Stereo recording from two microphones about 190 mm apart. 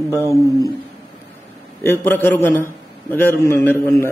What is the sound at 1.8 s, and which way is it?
A man's voice, 10° left (ahead or behind).